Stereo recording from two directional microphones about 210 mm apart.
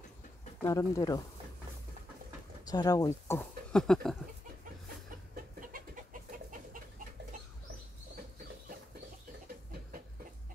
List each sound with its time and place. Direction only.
0.6 s speech: 15° left (ahead or behind)
2.7 s speech: 20° left (ahead or behind); by 4.2 s 5° left (ahead or behind)
5.3 s chicken: 40° right (ahead or behind)